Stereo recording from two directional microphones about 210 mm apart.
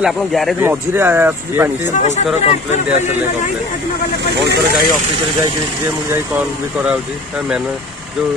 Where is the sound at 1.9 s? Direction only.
35° left (ahead or behind).